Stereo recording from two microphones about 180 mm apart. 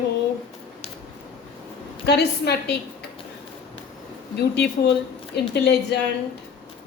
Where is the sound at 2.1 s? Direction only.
65° left (ahead or behind).